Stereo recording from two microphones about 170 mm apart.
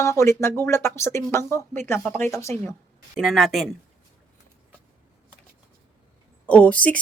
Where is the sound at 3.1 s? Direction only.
Centre (ahead or behind).